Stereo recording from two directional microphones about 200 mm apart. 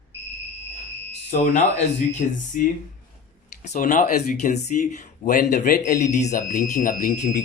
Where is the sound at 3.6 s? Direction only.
40° left (ahead or behind).